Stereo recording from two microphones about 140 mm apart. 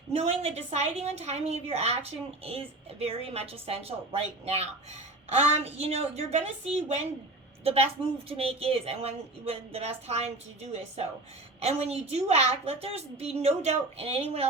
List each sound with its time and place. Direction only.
0.2 s a woman's voice: 50° right (ahead or behind)